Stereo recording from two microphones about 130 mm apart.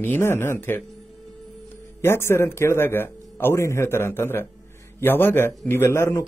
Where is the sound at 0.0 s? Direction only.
15° left (ahead or behind).